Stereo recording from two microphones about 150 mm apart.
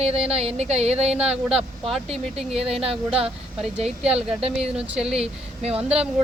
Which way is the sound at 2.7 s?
40° right (ahead or behind).